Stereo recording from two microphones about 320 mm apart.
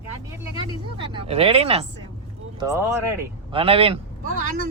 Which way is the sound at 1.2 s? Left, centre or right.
Centre.